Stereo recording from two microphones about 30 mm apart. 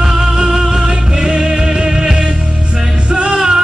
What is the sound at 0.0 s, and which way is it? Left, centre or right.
Music, centre.